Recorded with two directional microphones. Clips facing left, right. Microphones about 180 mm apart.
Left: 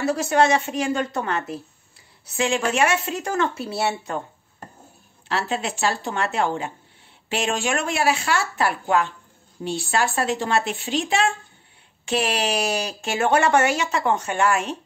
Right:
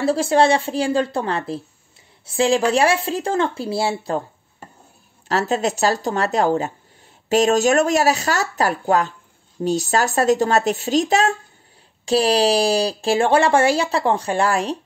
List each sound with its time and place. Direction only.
0.0 s speech: 30° right (ahead or behind)
5.3 s speech: 40° right (ahead or behind)